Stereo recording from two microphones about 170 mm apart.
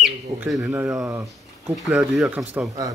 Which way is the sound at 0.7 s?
15° right (ahead or behind).